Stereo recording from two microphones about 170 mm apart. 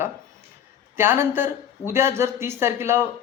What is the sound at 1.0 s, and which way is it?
Speech, 15° right (ahead or behind).